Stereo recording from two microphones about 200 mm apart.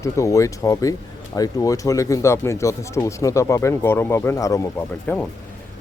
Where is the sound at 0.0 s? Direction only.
15° left (ahead or behind).